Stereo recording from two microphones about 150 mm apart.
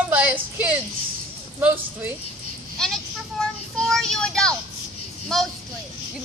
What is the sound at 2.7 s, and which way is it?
Vehicle, 5° left (ahead or behind).